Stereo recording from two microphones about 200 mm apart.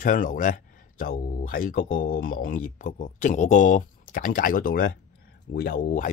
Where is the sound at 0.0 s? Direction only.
40° left (ahead or behind).